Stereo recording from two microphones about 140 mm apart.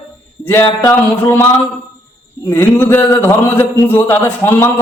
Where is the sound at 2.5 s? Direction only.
15° left (ahead or behind).